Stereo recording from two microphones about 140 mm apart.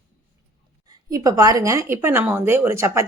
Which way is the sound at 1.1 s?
25° right (ahead or behind).